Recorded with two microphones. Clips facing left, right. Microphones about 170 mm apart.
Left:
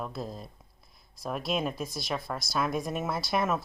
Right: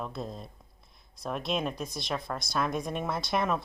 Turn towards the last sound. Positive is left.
turn(degrees=5)  # may be behind; listen again after turning